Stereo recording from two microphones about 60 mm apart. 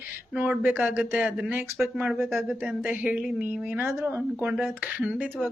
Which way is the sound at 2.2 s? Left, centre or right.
Right.